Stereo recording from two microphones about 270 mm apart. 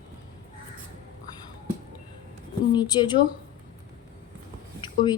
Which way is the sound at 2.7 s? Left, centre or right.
Centre.